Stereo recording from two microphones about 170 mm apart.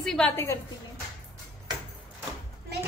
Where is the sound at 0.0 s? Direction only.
Centre (ahead or behind).